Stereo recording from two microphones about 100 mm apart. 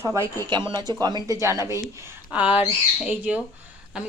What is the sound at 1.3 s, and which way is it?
Speech, 30° right (ahead or behind).